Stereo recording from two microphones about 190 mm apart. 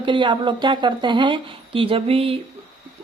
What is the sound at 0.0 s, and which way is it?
Speech, 25° right (ahead or behind).